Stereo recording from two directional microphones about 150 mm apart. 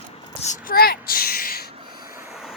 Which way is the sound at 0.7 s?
90° left.